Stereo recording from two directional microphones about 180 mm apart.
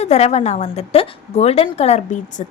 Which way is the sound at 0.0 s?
35° left (ahead or behind).